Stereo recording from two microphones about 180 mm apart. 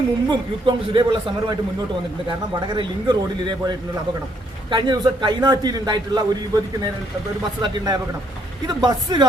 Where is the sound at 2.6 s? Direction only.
25° right (ahead or behind).